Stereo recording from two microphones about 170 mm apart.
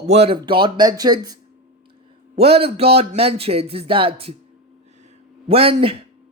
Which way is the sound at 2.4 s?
35° right (ahead or behind).